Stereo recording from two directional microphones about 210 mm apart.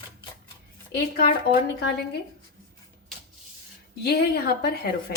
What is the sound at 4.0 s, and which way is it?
Speech, 50° left (ahead or behind).